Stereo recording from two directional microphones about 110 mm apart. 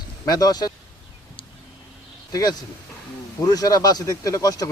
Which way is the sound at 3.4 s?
35° left (ahead or behind).